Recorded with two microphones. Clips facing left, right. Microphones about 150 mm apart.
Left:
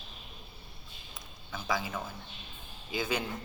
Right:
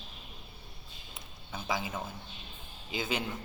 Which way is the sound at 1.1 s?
25° right (ahead or behind).